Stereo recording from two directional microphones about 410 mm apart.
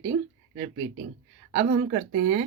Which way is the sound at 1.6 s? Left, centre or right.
Centre.